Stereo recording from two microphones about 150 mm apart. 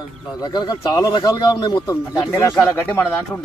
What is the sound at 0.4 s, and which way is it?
Speech, 30° left (ahead or behind).